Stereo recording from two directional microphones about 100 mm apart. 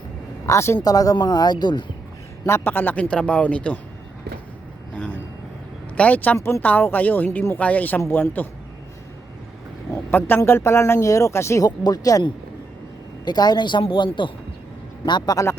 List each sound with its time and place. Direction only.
0.4 s speech: 30° left (ahead or behind); by 1.8 s 45° left (ahead or behind)
2.5 s speech: 20° left (ahead or behind)
4.9 s vehicle: 10° left (ahead or behind)
6.0 s speech: 15° left (ahead or behind)
9.9 s speech: 20° left (ahead or behind)
11.8 s speech: 40° left (ahead or behind)
13.2 s speech: 45° left (ahead or behind)